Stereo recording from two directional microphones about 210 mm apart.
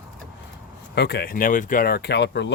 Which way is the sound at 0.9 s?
50° left (ahead or behind).